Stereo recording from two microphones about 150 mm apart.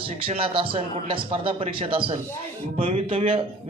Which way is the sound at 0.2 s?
35° right (ahead or behind).